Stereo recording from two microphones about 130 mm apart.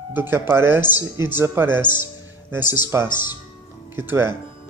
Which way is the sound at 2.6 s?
30° left (ahead or behind).